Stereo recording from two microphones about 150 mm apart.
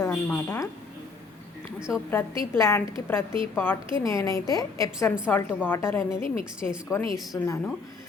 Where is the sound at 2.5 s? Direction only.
20° left (ahead or behind).